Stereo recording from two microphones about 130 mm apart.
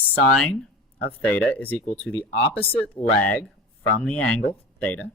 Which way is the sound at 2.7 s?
10° left (ahead or behind).